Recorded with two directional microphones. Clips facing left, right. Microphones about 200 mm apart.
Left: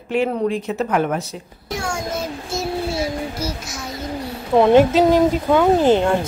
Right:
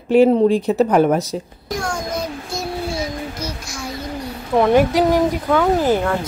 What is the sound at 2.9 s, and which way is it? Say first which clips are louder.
Music: left 2 dB; 25° left (ahead or behind).